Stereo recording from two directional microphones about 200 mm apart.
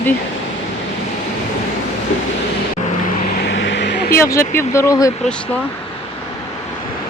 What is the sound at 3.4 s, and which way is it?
Vehicle, 65° left (ahead or behind).